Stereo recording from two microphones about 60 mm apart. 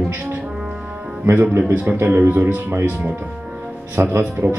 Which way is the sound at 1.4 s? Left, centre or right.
Right.